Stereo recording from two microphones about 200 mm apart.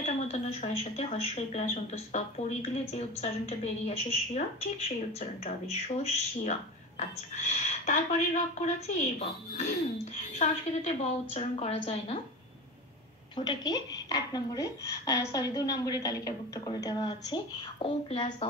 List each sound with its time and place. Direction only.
0.0 s a woman's voice: 35° left (ahead or behind)
10.4 s a woman's voice: 30° left (ahead or behind)
13.4 s a woman's voice: 20° left (ahead or behind)